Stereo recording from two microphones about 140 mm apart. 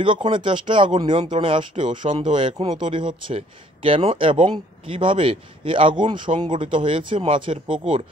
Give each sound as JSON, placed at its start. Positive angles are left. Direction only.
{"t": 0.0, "sound": "speech", "side_deg": -35}